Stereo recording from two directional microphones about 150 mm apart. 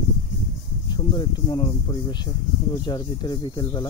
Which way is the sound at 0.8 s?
30° left (ahead or behind).